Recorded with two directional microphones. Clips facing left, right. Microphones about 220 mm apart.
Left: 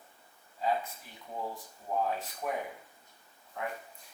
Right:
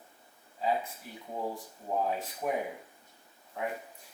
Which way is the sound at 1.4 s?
20° right (ahead or behind).